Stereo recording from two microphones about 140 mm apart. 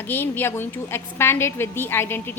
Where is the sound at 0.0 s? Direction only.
15° left (ahead or behind).